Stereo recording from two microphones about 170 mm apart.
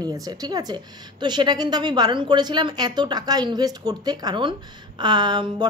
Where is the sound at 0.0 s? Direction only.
20° right (ahead or behind).